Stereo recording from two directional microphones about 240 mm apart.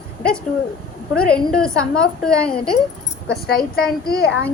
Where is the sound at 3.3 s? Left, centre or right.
Left.